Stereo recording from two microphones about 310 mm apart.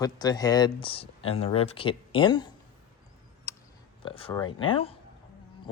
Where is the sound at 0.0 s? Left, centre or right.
Centre.